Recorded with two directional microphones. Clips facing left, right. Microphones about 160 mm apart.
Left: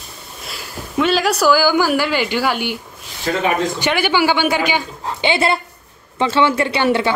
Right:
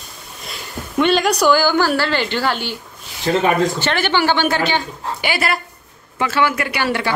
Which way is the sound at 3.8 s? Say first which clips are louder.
Left 1 dB; 10° left (ahead or behind).